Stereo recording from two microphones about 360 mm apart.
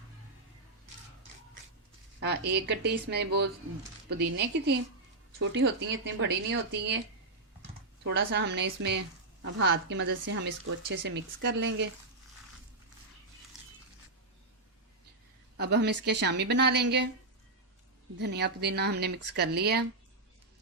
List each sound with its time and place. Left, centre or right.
2.2 s a woman's voice: right
8.0 s a woman's voice: right
15.5 s a woman's voice: right
18.2 s a woman's voice: right